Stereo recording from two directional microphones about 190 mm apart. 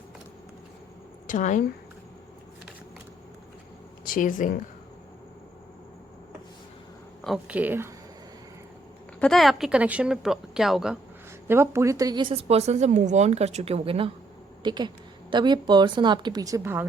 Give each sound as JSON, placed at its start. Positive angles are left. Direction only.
{"t": 1.3, "sound": "speech", "side_deg": 40}
{"t": 4.0, "sound": "speech", "side_deg": 45}
{"t": 7.3, "sound": "speech", "side_deg": -5}
{"t": 9.2, "sound": "speech", "side_deg": 0}
{"t": 11.4, "sound": "a woman's voice", "side_deg": -10}